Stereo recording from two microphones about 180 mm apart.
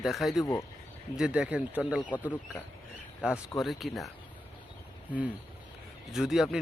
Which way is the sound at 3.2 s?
Centre (ahead or behind).